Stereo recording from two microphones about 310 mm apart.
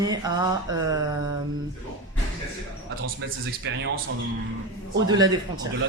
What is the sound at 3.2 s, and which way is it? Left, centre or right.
Speech, right.